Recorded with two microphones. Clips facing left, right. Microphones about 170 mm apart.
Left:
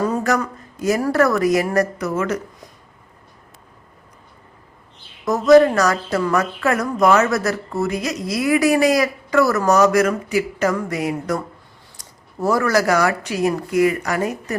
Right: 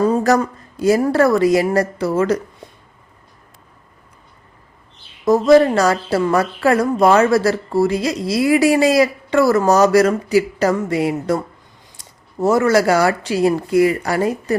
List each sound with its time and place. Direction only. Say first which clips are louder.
0.0 s a woman's voice: right 5 dB; 30° right (ahead or behind)
5.2 s a woman's voice: right 1 dB; 30° right (ahead or behind)